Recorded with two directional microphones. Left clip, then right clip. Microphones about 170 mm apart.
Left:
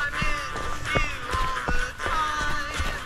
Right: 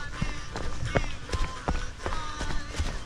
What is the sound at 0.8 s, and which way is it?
Run, 15° right (ahead or behind).